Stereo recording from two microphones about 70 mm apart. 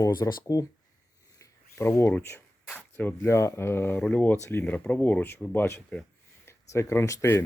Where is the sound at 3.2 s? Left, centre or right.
Left.